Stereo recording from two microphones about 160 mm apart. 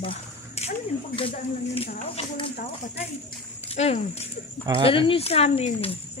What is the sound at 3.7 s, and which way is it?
Speech, 40° left (ahead or behind).